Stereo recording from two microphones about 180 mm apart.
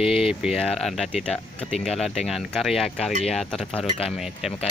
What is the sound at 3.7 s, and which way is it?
Speech, 35° left (ahead or behind).